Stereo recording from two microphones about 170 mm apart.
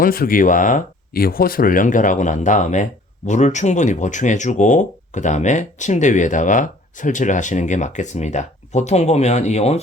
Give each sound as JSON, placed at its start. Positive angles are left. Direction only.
{"t": 0.0, "sound": "speech", "side_deg": 60}